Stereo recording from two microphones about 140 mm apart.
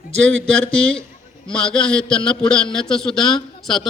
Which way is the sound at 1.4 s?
5° left (ahead or behind).